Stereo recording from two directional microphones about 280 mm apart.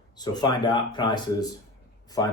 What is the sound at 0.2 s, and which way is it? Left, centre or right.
Speech, centre.